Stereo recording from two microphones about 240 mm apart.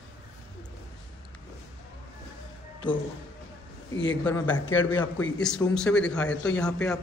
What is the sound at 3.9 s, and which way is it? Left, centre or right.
Speech, left.